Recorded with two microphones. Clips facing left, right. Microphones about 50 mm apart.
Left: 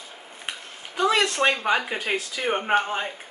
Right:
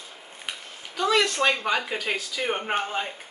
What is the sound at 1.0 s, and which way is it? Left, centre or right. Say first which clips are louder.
Speech: left 1 dB; left.